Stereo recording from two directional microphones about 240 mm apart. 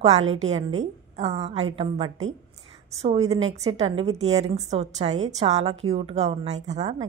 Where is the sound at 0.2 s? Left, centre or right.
Right.